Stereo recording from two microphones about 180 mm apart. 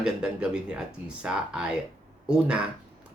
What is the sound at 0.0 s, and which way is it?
Speech, 5° right (ahead or behind).